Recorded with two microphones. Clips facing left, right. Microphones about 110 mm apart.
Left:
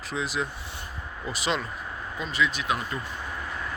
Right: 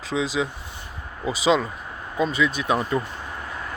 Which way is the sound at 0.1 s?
65° right (ahead or behind).